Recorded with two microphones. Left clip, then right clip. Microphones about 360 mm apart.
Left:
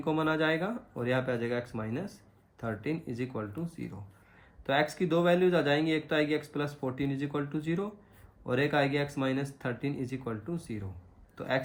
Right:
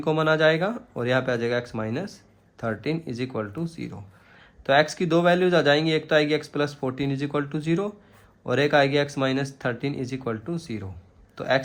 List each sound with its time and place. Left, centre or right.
0.0 s speech: right